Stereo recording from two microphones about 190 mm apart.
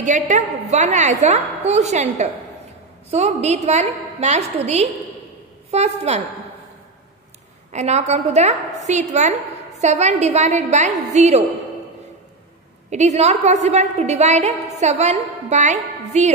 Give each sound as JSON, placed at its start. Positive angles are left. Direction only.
{"t": 0.0, "sound": "a woman's voice", "side_deg": -40}
{"t": 7.7, "sound": "a woman's voice", "side_deg": -35}
{"t": 12.9, "sound": "a woman's voice", "side_deg": -35}